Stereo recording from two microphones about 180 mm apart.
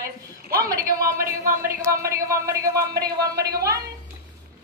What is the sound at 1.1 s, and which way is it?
Speech, 15° right (ahead or behind).